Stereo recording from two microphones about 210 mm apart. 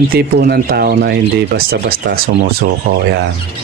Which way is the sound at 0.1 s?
45° right (ahead or behind).